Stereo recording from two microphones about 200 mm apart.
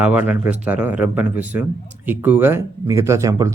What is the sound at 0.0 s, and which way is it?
Speech, 5° right (ahead or behind).